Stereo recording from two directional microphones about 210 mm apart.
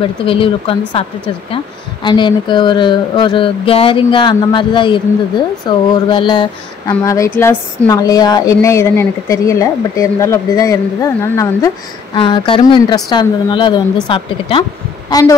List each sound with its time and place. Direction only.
0.2 s a woman's voice: 25° left (ahead or behind)